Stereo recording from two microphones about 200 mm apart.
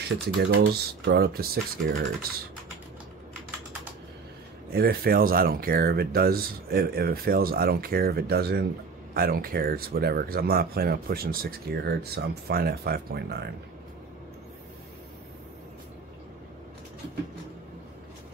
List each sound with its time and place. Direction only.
0.0 s speech: 55° right (ahead or behind)
4.7 s speech: 50° right (ahead or behind)